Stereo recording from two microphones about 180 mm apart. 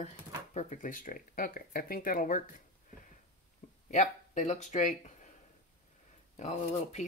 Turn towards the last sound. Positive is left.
turn(degrees=40)  # may be behind; listen again after turning